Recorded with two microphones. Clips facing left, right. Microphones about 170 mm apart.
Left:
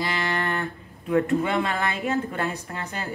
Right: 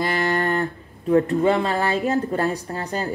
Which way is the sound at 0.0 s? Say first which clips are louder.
Right 5 dB; 45° right (ahead or behind).